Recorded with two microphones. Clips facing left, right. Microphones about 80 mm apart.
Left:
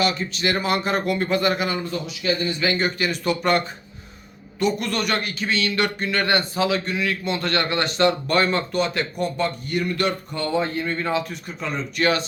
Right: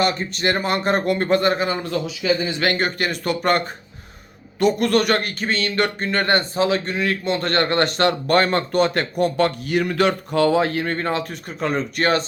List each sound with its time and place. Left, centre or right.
0.0 s speech: right
2.5 s speech: right
4.6 s speech: right
9.6 s speech: right
10.9 s speech: right